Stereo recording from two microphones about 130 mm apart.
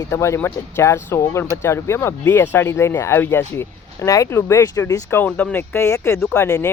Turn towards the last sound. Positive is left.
turn(degrees=20)  # may be behind; listen again after turning